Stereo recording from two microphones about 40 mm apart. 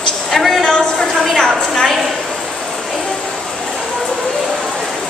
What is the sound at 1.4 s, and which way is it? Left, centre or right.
Speech, centre.